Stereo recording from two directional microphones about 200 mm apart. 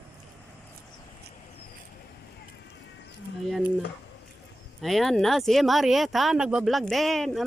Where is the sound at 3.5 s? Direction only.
5° right (ahead or behind).